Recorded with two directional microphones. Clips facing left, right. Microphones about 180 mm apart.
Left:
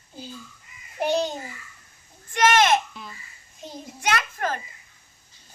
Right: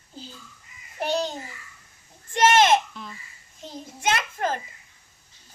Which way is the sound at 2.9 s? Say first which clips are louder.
Right 1 dB; 5° left (ahead or behind).